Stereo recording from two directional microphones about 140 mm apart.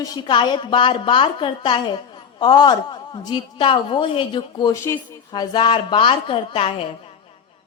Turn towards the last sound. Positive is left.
turn(degrees=45)  # may be behind; listen again after turning